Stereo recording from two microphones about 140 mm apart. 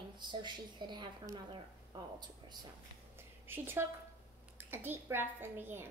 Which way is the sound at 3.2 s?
15° right (ahead or behind).